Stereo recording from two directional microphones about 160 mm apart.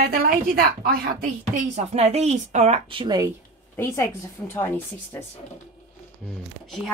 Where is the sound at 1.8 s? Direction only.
45° right (ahead or behind).